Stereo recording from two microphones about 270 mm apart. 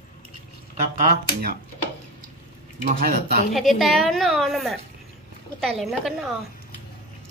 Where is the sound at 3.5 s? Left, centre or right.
Centre.